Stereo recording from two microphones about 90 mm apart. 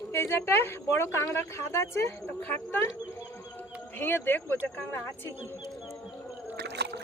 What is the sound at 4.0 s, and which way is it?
Speech, 25° left (ahead or behind).